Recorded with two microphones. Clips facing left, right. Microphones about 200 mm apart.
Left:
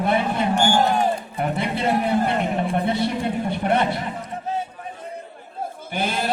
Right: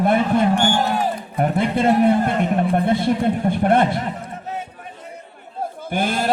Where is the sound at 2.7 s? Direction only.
50° right (ahead or behind).